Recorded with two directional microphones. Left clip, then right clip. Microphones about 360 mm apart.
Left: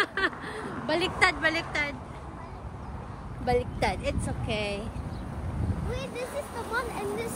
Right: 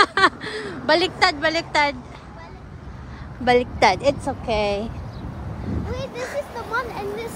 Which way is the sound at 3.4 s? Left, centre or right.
Right.